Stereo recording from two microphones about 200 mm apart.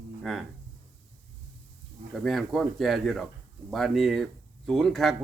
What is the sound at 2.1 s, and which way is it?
Speech, centre (ahead or behind).